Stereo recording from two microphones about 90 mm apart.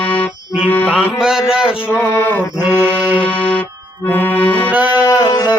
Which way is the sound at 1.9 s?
25° left (ahead or behind).